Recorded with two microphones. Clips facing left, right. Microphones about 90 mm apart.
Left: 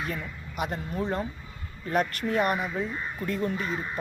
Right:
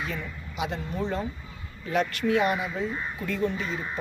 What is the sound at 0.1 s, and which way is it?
Speech, 50° left (ahead or behind).